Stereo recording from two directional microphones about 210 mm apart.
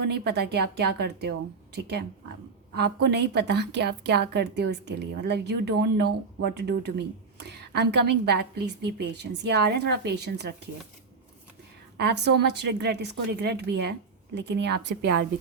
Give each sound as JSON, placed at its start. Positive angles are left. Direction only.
{"t": 0.0, "sound": "a woman's voice", "side_deg": -50}
{"t": 11.9, "sound": "a woman's voice", "side_deg": -55}